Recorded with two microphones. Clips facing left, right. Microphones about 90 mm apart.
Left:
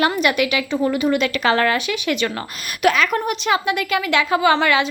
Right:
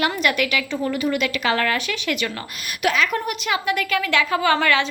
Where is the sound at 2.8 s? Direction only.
50° left (ahead or behind).